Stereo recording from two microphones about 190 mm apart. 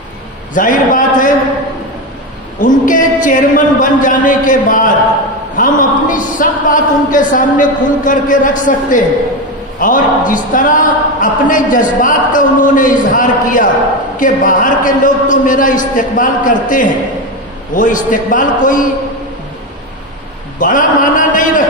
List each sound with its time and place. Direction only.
0.6 s a man's voice: 45° left (ahead or behind)
2.6 s a man's voice: 45° left (ahead or behind)
20.5 s a sound: 45° left (ahead or behind)